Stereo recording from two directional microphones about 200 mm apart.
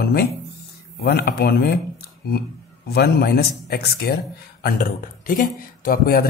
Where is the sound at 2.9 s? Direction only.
55° left (ahead or behind).